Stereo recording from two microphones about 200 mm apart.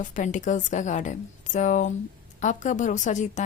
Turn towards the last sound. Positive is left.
turn(degrees=40)  # may be behind; listen again after turning